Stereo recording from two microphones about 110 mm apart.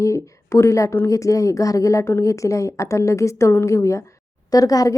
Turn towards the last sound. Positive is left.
turn(degrees=35)  # may be behind; listen again after turning